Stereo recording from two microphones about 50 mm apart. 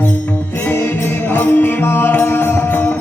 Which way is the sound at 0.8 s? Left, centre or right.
Left.